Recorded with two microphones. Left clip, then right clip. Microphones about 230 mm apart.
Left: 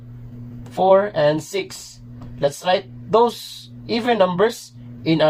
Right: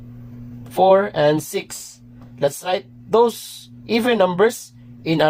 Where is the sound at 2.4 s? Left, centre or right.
Right.